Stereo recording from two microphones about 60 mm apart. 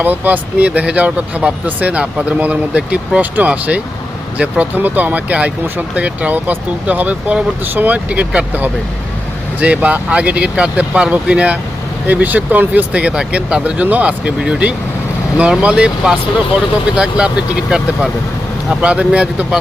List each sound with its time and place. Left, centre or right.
0.0 s speech: right